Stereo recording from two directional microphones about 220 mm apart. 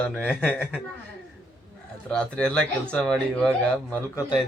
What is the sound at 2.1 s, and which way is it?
Speech, 5° left (ahead or behind).